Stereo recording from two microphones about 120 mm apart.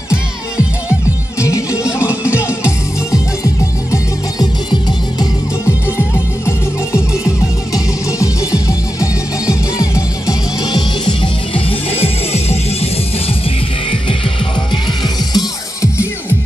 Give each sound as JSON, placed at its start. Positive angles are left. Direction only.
{"t": 1.4, "sound": "music", "side_deg": 25}
{"t": 1.8, "sound": "music", "side_deg": -10}
{"t": 2.4, "sound": "music", "side_deg": 25}
{"t": 5.9, "sound": "music", "side_deg": 20}
{"t": 11.9, "sound": "music", "side_deg": 60}
{"t": 15.3, "sound": "music", "side_deg": 30}